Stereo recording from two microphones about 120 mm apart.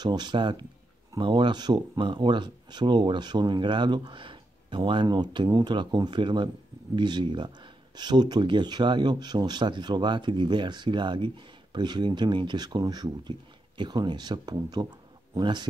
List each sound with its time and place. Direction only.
0.0 s speech: 35° right (ahead or behind)